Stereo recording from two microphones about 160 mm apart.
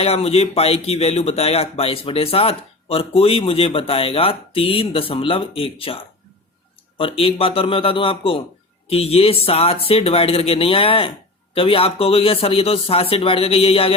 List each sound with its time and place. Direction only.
0.0 s speech: 40° left (ahead or behind)